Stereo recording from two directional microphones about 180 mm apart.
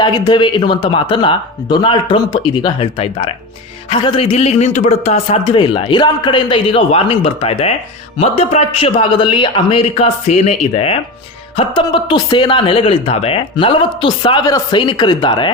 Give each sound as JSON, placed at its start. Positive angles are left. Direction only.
{"t": 0.0, "sound": "a man's voice", "side_deg": 25}